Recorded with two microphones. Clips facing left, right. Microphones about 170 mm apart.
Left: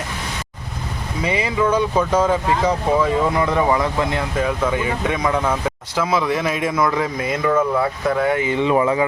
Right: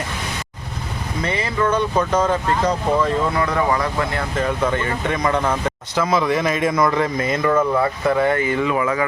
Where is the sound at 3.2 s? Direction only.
20° left (ahead or behind).